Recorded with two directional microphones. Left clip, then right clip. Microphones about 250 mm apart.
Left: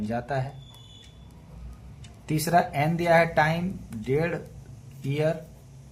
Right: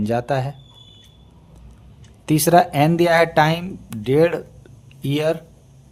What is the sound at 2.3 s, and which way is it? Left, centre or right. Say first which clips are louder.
Speech: right 9 dB; right.